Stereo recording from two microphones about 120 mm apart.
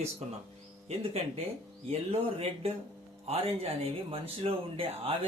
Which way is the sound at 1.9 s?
60° right (ahead or behind).